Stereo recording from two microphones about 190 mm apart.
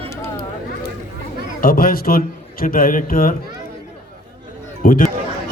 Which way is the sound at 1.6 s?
50° left (ahead or behind).